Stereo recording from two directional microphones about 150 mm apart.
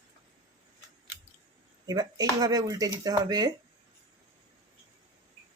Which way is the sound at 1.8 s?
25° right (ahead or behind).